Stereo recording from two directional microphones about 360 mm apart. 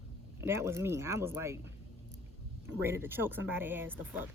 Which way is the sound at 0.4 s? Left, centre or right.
Centre.